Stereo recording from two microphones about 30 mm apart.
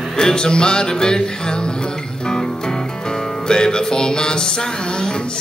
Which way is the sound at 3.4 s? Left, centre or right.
Left.